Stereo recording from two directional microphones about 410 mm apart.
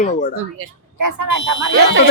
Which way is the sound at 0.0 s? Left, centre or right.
Centre.